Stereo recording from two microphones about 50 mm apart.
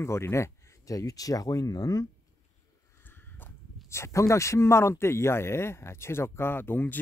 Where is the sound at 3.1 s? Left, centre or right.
Left.